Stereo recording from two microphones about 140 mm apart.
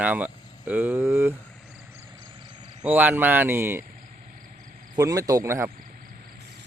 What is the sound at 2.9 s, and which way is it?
Speech, 10° right (ahead or behind).